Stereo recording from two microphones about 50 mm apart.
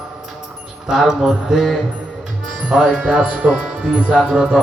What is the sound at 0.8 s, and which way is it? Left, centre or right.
Speech, centre.